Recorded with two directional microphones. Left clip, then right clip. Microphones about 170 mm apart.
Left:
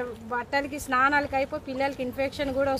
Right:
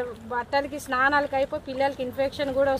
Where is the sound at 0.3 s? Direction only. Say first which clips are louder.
Right 2 dB; 10° left (ahead or behind).